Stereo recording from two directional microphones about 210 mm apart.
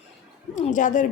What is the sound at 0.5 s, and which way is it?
Speech, 35° left (ahead or behind).